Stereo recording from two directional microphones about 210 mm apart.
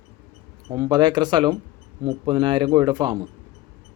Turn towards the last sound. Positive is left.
turn(degrees=-20)  # may be behind; listen again after turning